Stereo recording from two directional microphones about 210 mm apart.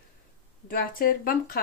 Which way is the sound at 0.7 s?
45° left (ahead or behind).